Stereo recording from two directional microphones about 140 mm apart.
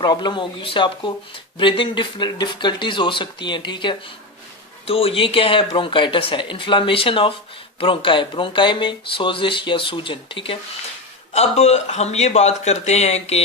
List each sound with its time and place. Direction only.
0.0 s speech: 30° left (ahead or behind)
11.3 s speech: 50° left (ahead or behind)